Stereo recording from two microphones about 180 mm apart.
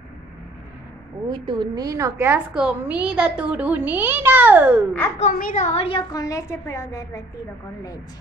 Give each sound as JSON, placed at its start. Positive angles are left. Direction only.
{"t": 1.3, "sound": "a woman's voice", "side_deg": -25}
{"t": 5.2, "sound": "a woman's voice", "side_deg": 50}
{"t": 6.1, "sound": "a woman's voice", "side_deg": 20}